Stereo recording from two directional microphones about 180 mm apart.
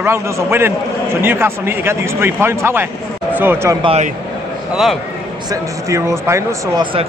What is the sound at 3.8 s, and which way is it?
Speech, 30° right (ahead or behind).